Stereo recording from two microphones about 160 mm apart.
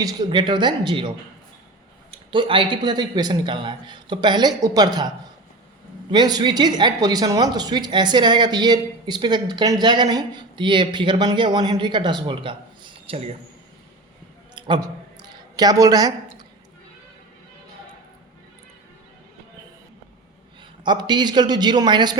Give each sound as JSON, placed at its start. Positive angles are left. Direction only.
{"t": 0.0, "sound": "a woman's voice", "side_deg": -25}
{"t": 14.5, "sound": "a sound", "side_deg": -25}
{"t": 20.8, "sound": "a woman's voice", "side_deg": -25}